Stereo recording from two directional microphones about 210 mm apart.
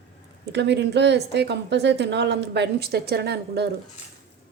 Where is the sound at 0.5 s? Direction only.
55° right (ahead or behind).